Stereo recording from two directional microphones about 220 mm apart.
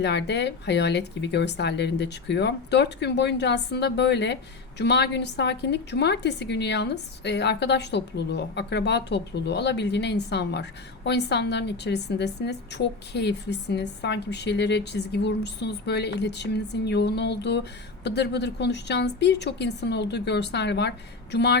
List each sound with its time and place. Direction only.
0.0 s a woman's voice: 50° left (ahead or behind)